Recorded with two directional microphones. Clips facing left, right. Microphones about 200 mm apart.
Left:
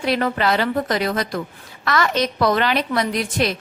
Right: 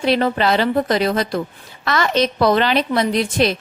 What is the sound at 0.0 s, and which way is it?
A woman's voice, 30° right (ahead or behind).